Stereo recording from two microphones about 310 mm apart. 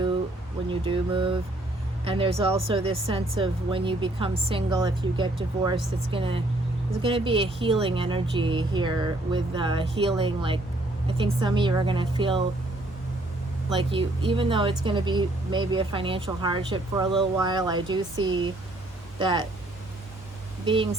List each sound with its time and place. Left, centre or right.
0.7 s speech: centre
13.7 s speech: centre